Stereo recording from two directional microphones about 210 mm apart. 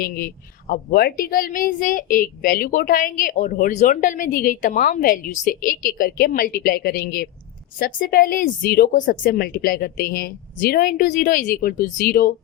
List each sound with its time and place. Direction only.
0.7 s a woman's voice: 45° left (ahead or behind)